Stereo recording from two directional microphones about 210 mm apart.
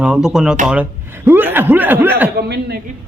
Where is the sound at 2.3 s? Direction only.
50° right (ahead or behind).